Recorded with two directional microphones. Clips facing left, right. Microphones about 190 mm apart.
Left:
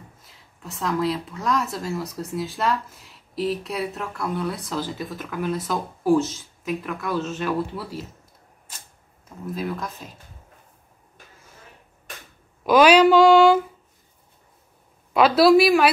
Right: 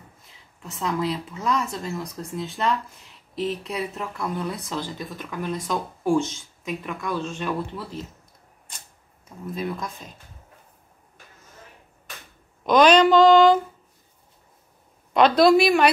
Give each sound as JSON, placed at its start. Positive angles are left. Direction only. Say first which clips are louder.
{"t": 0.6, "sound": "speech", "louder": "left 2 dB", "side_deg": 0}
{"t": 9.5, "sound": "speech", "louder": "left 1 dB", "side_deg": 0}
{"t": 12.6, "sound": "speech", "louder": "left 1 dB", "side_deg": 5}
{"t": 15.1, "sound": "speech", "louder": "left 1 dB", "side_deg": 5}